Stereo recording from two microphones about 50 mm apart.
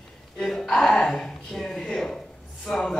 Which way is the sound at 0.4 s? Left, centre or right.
Centre.